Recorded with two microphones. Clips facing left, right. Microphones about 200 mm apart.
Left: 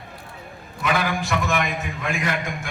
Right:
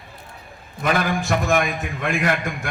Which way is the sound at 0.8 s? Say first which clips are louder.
Right 2 dB; 45° right (ahead or behind).